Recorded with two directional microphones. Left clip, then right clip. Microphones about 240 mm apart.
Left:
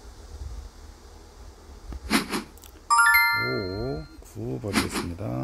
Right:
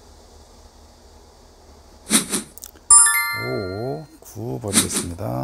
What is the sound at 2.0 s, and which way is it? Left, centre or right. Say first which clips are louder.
Cat: right 3 dB; centre.